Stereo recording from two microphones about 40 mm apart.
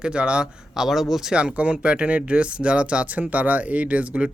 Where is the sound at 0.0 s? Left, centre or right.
Right.